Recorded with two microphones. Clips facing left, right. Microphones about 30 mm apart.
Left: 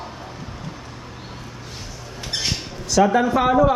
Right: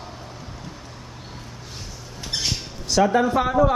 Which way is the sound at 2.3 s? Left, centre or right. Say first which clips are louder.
Left 1 dB; centre.